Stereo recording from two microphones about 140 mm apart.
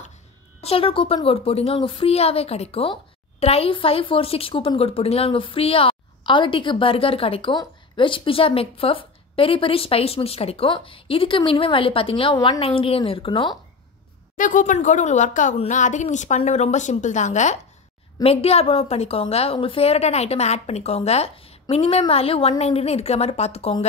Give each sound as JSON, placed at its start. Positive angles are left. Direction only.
{"t": 0.6, "sound": "a woman's voice", "side_deg": 45}
{"t": 14.3, "sound": "a woman's voice", "side_deg": 70}
{"t": 18.2, "sound": "a woman's voice", "side_deg": 45}